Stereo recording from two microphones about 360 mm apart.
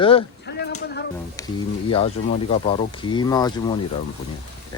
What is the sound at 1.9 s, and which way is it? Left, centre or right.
Speech, centre.